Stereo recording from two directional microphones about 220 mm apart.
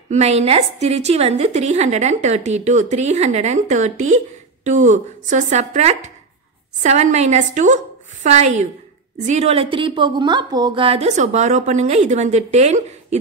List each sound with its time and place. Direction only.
0.1 s a woman's voice: 30° right (ahead or behind)